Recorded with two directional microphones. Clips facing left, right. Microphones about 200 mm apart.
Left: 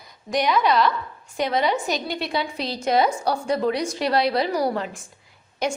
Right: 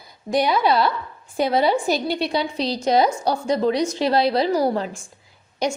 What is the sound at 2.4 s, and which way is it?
Speech, centre (ahead or behind).